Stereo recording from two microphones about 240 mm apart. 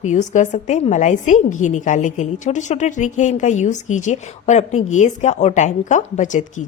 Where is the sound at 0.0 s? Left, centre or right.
Left.